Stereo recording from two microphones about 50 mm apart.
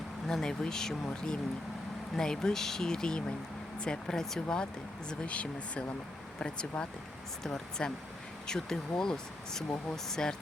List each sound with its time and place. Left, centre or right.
0.3 s speech: centre